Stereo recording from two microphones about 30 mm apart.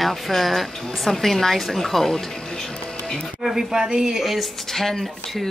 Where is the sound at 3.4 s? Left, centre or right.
Centre.